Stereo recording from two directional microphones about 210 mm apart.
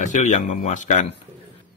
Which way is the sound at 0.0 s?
35° left (ahead or behind).